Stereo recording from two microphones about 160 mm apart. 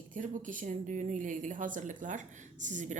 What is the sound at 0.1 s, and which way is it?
A woman's voice, 55° right (ahead or behind).